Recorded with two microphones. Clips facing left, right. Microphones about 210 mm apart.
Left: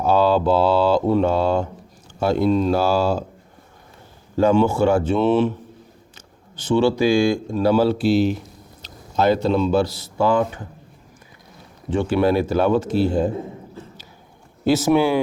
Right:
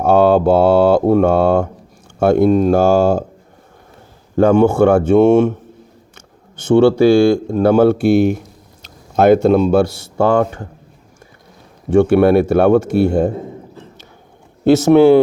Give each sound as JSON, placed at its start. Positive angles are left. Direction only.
{"t": 0.0, "sound": "mantra", "side_deg": -50}
{"t": 4.4, "sound": "mantra", "side_deg": -55}
{"t": 6.1, "sound": "a sound", "side_deg": -50}
{"t": 7.5, "sound": "mantra", "side_deg": -50}
{"t": 11.9, "sound": "speech", "side_deg": -60}